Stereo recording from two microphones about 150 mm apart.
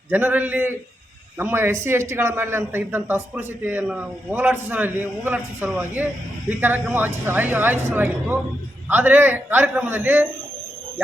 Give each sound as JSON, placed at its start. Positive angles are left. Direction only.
{"t": 0.1, "sound": "a man's voice", "side_deg": -10}